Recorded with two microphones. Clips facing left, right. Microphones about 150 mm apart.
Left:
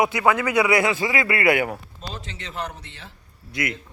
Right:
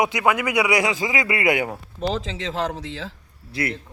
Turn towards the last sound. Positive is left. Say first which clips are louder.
# right 2 dB
turn(degrees=-30)  # may be behind; listen again after turning